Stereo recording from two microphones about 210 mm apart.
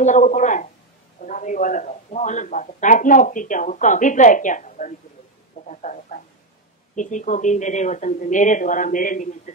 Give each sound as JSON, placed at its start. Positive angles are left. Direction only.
{"t": 0.0, "sound": "speech", "side_deg": 35}